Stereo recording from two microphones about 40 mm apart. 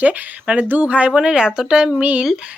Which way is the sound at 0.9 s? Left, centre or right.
Right.